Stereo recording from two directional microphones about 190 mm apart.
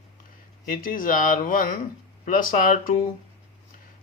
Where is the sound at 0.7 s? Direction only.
45° left (ahead or behind).